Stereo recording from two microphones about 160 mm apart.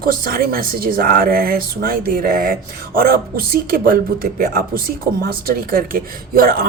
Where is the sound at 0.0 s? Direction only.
65° right (ahead or behind).